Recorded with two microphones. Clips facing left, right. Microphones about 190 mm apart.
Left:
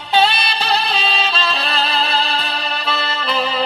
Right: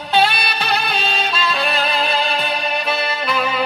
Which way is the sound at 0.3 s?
30° left (ahead or behind).